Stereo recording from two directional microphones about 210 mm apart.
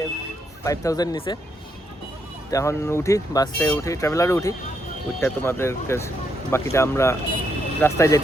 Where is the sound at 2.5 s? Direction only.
15° left (ahead or behind).